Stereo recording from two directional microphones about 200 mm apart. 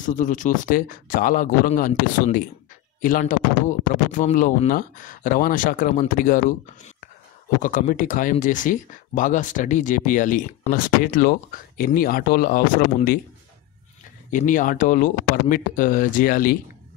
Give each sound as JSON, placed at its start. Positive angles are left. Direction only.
{"t": 0.0, "sound": "speech", "side_deg": 40}
{"t": 7.6, "sound": "speech", "side_deg": 40}
{"t": 14.3, "sound": "speech", "side_deg": 40}